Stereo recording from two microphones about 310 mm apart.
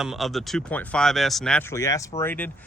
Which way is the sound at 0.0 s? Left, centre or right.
Centre.